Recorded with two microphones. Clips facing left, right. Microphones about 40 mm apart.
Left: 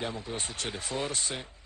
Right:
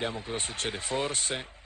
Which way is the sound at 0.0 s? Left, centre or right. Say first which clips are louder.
Right 2 dB; right.